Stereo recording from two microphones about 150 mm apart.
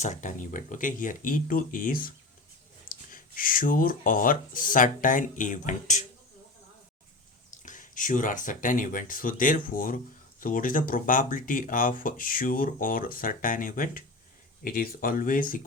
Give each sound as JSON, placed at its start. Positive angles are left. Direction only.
{"t": 0.0, "sound": "speech", "side_deg": 55}
{"t": 7.6, "sound": "speech", "side_deg": 60}